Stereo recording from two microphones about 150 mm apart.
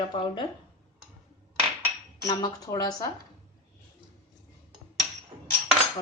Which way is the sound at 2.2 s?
25° left (ahead or behind).